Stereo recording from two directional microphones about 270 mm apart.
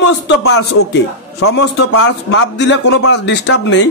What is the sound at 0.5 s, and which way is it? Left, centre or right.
A man's voice, left.